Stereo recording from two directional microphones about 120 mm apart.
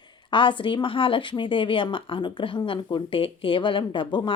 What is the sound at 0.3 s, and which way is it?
Speech, 45° left (ahead or behind).